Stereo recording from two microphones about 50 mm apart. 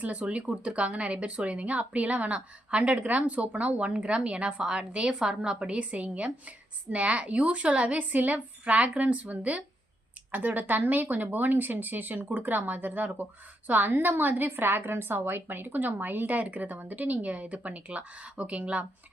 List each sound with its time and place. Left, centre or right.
0.0 s a woman's voice: right
5.7 s a woman's voice: right